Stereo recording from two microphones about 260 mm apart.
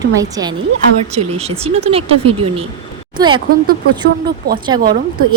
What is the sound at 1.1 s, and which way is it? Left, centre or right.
A woman's voice, right.